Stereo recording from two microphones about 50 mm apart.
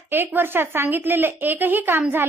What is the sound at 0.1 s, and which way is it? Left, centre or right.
A woman's voice, right.